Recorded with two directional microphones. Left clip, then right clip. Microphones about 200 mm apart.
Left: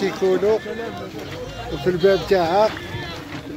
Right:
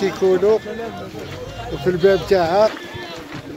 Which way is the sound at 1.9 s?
Centre (ahead or behind).